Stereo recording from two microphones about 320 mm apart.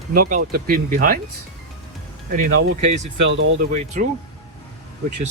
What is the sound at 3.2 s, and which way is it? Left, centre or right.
Speech, right.